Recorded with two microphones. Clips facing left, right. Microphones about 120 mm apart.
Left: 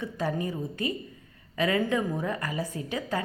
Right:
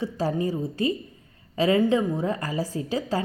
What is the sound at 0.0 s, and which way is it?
A woman's voice, 30° right (ahead or behind).